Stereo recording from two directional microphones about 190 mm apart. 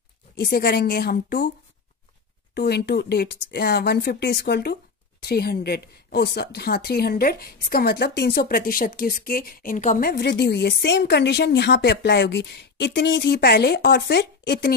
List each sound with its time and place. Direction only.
0.4 s speech: 55° left (ahead or behind)
2.5 s speech: 60° left (ahead or behind)